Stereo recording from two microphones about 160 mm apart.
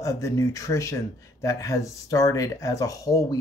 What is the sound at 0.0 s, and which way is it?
Speech, 20° left (ahead or behind).